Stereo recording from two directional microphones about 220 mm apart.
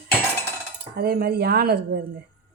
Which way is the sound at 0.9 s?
45° right (ahead or behind).